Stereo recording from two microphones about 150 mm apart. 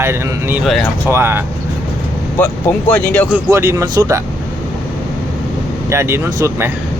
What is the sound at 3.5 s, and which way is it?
Speech, 20° right (ahead or behind).